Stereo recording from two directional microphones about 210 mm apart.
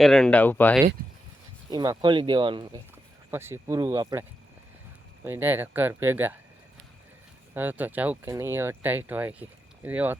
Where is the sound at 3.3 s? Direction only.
10° right (ahead or behind).